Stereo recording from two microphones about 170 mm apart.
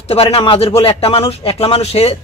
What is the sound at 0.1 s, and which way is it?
A man's voice, 35° left (ahead or behind).